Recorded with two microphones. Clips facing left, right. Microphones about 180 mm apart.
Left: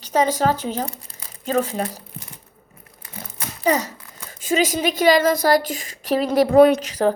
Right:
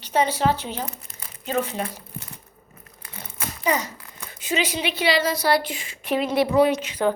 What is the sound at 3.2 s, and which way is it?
Crumpling, 35° left (ahead or behind).